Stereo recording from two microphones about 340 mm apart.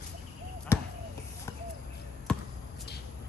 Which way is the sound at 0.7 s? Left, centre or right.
Centre.